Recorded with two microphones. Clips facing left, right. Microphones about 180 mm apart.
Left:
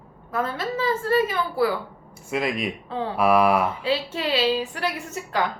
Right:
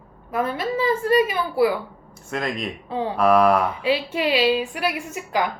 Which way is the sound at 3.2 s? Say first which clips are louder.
Right 2 dB; 5° left (ahead or behind).